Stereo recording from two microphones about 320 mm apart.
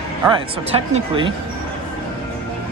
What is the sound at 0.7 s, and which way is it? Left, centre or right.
Speech, centre.